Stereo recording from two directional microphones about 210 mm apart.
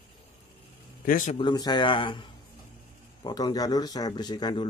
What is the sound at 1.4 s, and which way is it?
Speech, 20° left (ahead or behind).